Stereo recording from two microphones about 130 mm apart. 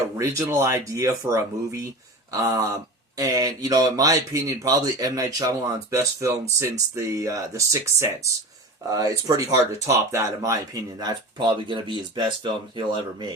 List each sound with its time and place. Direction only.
0.2 s speech: 20° right (ahead or behind)